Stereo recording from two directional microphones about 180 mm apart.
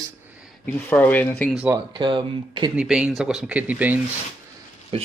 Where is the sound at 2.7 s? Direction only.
5° right (ahead or behind).